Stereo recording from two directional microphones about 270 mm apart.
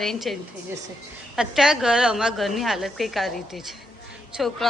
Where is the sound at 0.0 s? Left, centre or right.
Centre.